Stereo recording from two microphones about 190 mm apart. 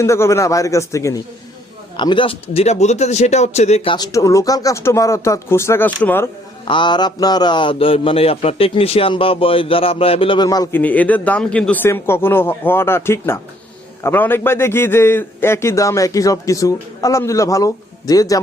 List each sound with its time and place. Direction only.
0.0 s a man's voice: 15° left (ahead or behind)
2.0 s speech: 25° left (ahead or behind)
3.9 s a man's voice: 20° left (ahead or behind)
6.7 s a man's voice: 25° left (ahead or behind)